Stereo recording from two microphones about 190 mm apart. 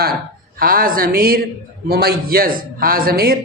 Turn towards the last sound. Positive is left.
turn(degrees=-50)  # may be behind; listen again after turning